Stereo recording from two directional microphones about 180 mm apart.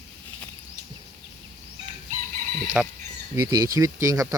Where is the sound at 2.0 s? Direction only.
40° right (ahead or behind).